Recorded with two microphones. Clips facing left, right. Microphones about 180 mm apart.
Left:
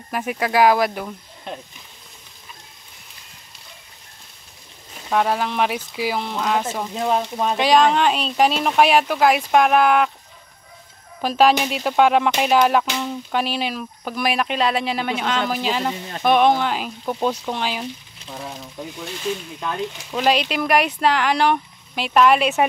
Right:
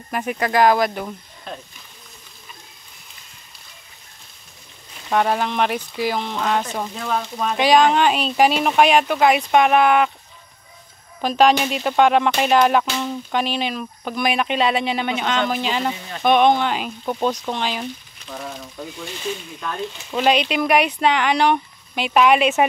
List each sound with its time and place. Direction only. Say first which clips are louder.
0.1 s speech: even; 5° left (ahead or behind)
5.1 s speech: right 1 dB; centre (ahead or behind)
7.0 s speech: left 5 dB; 25° left (ahead or behind)
7.5 s speech: right 1 dB; centre (ahead or behind)
11.1 s speech: even; 5° left (ahead or behind)
20.1 s speech: right 2 dB; centre (ahead or behind)